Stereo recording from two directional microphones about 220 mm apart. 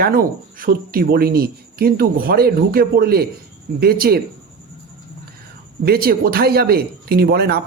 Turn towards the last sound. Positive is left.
turn(degrees=-45)  # may be behind; listen again after turning